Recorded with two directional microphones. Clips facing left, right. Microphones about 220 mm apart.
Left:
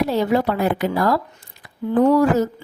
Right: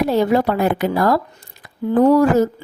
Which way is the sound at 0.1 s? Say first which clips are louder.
Right 3 dB; 50° right (ahead or behind).